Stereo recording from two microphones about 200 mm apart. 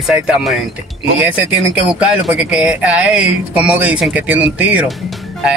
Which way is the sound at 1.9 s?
5° right (ahead or behind).